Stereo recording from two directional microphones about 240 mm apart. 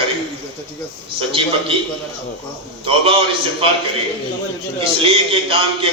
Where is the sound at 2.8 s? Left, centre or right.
Right.